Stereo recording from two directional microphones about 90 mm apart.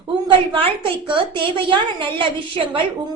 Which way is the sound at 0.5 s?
75° right (ahead or behind).